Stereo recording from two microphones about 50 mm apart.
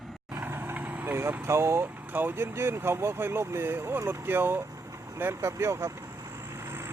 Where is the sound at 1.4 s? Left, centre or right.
Right.